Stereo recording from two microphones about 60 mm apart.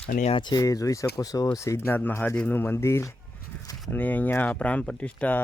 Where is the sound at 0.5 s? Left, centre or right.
Left.